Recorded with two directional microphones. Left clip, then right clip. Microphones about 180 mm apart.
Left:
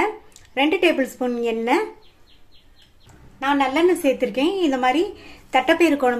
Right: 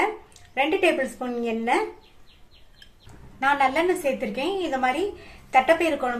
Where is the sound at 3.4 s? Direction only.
25° left (ahead or behind).